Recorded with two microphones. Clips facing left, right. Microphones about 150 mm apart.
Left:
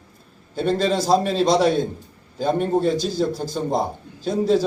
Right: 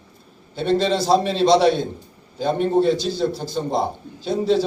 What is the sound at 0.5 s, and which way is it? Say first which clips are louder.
A man's voice: right 1 dB; 45° left (ahead or behind).